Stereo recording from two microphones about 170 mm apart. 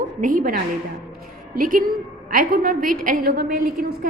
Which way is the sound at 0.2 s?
50° right (ahead or behind).